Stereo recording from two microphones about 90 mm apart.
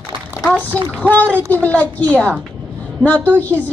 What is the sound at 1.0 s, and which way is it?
A woman's voice, 15° left (ahead or behind).